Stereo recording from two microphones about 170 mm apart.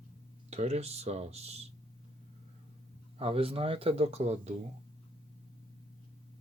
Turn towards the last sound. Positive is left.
turn(degrees=-40)  # may be behind; listen again after turning